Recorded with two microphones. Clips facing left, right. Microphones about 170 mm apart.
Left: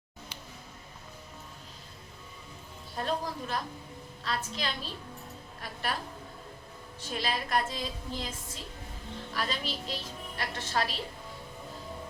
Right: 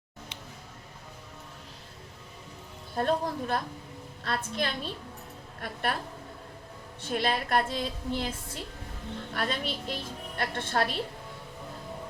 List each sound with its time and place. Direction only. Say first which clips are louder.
2.9 s a woman's voice: right 5 dB; 55° right (ahead or behind)
7.0 s a woman's voice: right 5 dB; 60° right (ahead or behind)
9.3 s a woman's voice: right 2 dB; 55° right (ahead or behind)